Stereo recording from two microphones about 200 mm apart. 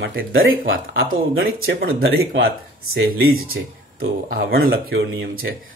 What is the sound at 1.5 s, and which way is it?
Speech, 50° right (ahead or behind).